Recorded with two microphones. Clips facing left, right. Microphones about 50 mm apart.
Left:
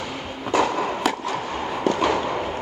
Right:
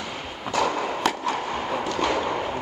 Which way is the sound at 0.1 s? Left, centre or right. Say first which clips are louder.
Left 4 dB; centre.